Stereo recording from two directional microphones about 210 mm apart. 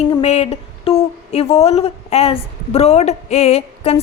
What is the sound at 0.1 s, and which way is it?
A woman's voice, 30° left (ahead or behind).